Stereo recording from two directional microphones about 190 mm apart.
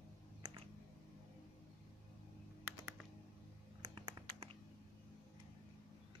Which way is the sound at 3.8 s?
20° right (ahead or behind).